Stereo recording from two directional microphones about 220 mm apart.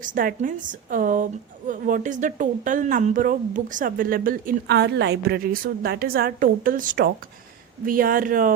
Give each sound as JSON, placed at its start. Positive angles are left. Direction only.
{"t": 0.0, "sound": "a woman's voice", "side_deg": -40}